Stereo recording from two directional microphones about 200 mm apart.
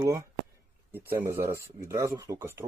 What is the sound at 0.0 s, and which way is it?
Speech, 15° right (ahead or behind).